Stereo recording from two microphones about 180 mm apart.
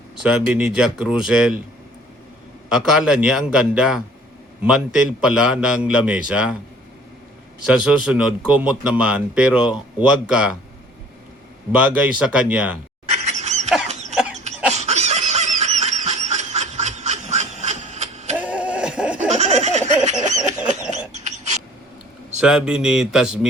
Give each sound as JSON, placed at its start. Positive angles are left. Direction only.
{"t": 0.2, "sound": "a man's voice", "side_deg": -5}
{"t": 2.6, "sound": "a man's voice", "side_deg": -5}
{"t": 7.7, "sound": "a man's voice", "side_deg": -5}
{"t": 11.8, "sound": "speech", "side_deg": -5}
{"t": 13.4, "sound": "a sound", "side_deg": -40}
{"t": 13.8, "sound": "cough", "side_deg": -40}
{"t": 14.7, "sound": "baby laughter", "side_deg": -40}
{"t": 18.3, "sound": "a sound", "side_deg": -10}
{"t": 19.3, "sound": "goat", "side_deg": -40}
{"t": 22.4, "sound": "a man's voice", "side_deg": -5}